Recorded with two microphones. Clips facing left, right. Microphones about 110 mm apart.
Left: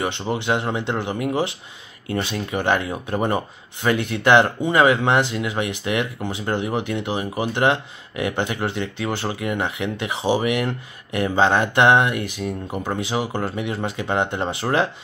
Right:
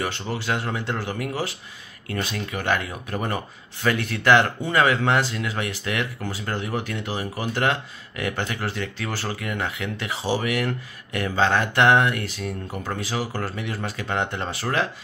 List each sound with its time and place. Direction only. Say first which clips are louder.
0.0 s speech: left 4 dB; 20° left (ahead or behind)